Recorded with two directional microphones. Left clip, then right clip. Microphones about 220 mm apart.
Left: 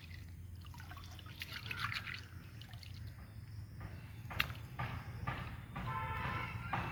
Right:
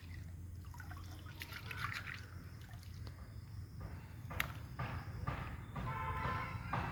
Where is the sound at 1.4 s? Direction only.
5° right (ahead or behind).